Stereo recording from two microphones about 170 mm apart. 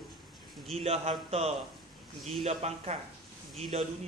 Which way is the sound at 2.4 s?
40° right (ahead or behind).